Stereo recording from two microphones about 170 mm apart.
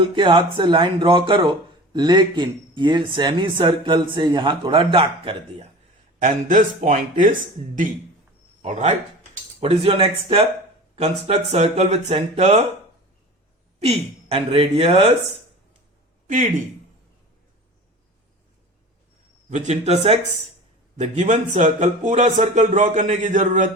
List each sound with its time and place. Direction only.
0.0 s speech: 30° right (ahead or behind)
6.2 s speech: 50° right (ahead or behind)
8.6 s speech: 45° right (ahead or behind)
9.6 s speech: 35° right (ahead or behind)
13.7 s speech: 35° right (ahead or behind)
19.5 s speech: 40° right (ahead or behind)